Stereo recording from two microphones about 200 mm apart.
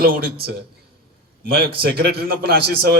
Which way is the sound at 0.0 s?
50° right (ahead or behind).